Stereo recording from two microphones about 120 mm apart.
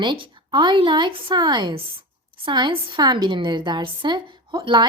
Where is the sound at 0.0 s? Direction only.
40° right (ahead or behind).